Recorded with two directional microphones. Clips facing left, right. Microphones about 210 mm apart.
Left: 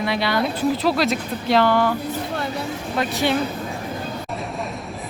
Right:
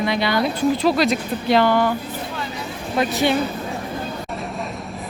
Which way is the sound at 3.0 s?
Centre (ahead or behind).